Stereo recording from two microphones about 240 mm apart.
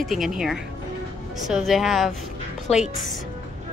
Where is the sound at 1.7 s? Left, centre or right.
Centre.